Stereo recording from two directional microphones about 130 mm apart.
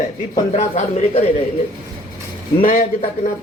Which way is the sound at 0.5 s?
55° left (ahead or behind).